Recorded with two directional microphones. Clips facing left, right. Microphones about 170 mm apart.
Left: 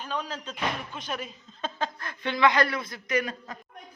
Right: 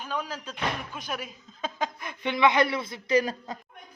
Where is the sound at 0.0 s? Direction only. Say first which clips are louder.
Even; 10° right (ahead or behind).